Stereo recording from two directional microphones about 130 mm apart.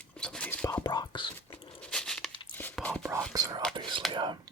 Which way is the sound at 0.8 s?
35° left (ahead or behind).